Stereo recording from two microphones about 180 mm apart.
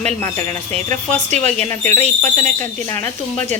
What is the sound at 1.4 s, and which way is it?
Speech, 40° right (ahead or behind).